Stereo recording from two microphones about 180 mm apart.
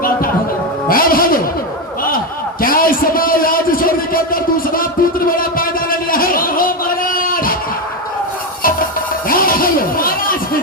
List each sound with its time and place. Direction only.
0.9 s music: 55° left (ahead or behind)
2.0 s a sound: 55° left (ahead or behind)
9.2 s music: 50° left (ahead or behind)